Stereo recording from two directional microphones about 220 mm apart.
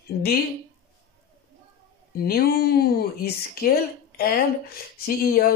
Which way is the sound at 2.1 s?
45° left (ahead or behind).